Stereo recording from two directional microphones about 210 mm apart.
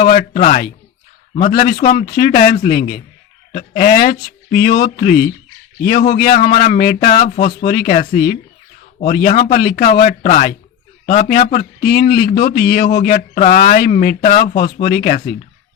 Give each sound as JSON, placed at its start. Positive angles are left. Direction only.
{"t": 0.0, "sound": "a man's voice", "side_deg": 40}